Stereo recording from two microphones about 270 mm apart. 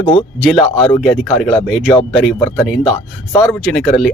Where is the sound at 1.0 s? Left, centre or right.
Centre.